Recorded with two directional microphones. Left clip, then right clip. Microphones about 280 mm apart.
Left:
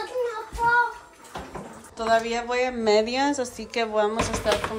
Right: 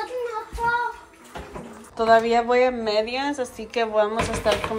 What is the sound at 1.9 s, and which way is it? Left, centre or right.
Speech, centre.